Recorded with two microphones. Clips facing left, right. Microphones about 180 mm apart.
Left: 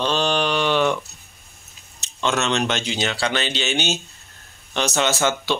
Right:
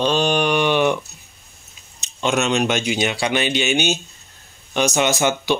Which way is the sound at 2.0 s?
15° right (ahead or behind).